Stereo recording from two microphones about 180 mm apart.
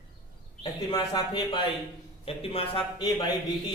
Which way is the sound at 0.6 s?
25° left (ahead or behind).